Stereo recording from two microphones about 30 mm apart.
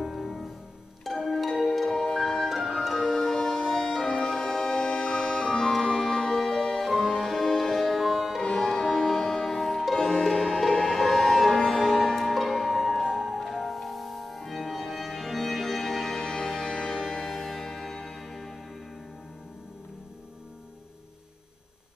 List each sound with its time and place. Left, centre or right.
0.0 s music: centre
1.0 s pizzicato: centre
1.4 s music: centre
1.9 s music: centre
2.5 s music: centre
3.3 s music: centre
4.3 s music: centre
4.8 s music: left
5.4 s music: centre
9.9 s music: centre
13.0 s music: centre
13.4 s music: centre
16.2 s music: centre
16.9 s music: centre